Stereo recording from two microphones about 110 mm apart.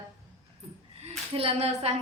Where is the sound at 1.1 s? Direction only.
70° right (ahead or behind).